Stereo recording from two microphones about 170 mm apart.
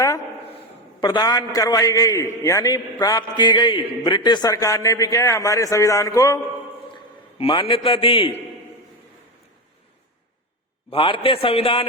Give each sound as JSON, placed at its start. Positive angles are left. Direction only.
{"t": 1.0, "sound": "a man's voice", "side_deg": 25}
{"t": 6.9, "sound": "a sound", "side_deg": 30}
{"t": 7.9, "sound": "a man's voice", "side_deg": 30}
{"t": 10.9, "sound": "a man's voice", "side_deg": 30}